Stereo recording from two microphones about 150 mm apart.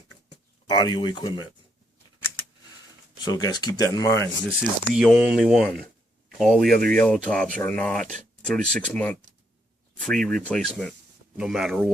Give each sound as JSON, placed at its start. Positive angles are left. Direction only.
{"t": 0.7, "sound": "speech", "side_deg": 30}
{"t": 3.2, "sound": "speech", "side_deg": 25}
{"t": 4.4, "sound": "speech", "side_deg": -5}